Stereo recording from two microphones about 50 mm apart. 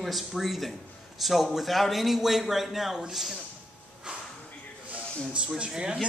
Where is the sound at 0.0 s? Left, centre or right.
Centre.